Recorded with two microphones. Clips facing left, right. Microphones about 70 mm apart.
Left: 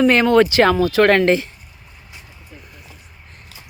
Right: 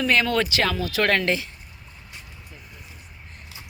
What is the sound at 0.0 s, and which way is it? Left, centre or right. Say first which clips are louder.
Speech: left 9 dB; left.